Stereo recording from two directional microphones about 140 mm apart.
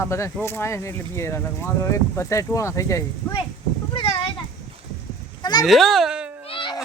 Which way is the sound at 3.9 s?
40° left (ahead or behind).